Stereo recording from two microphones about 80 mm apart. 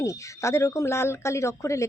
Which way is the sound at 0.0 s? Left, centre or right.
Left.